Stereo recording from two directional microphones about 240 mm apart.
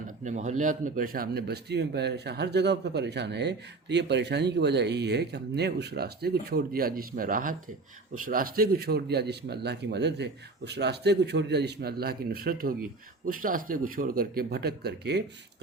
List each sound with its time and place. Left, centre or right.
0.3 s a man's voice: right